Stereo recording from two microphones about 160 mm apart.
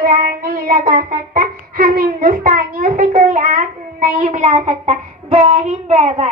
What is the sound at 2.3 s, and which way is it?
A child's voice, 55° right (ahead or behind).